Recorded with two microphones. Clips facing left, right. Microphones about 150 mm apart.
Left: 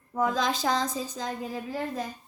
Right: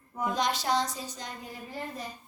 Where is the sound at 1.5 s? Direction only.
90° left.